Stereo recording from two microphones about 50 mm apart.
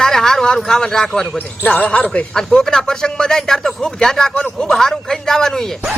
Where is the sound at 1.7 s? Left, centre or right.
Left.